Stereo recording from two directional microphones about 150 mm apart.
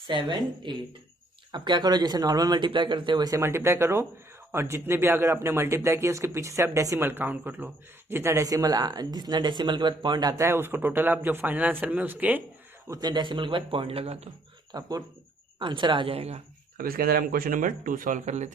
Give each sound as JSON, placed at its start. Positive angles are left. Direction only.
{"t": 0.1, "sound": "a man's voice", "side_deg": -30}
{"t": 12.9, "sound": "a man's voice", "side_deg": -25}
{"t": 14.7, "sound": "a man's voice", "side_deg": -25}
{"t": 16.7, "sound": "speech", "side_deg": -75}